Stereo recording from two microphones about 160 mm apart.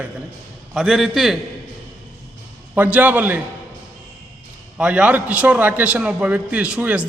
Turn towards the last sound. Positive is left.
turn(degrees=-10)  # may be behind; listen again after turning